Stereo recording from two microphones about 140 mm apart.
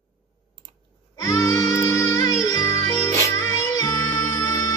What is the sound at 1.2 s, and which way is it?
Music, 20° left (ahead or behind).